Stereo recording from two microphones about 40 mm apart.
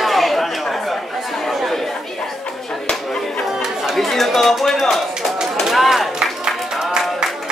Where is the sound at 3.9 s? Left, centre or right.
Centre.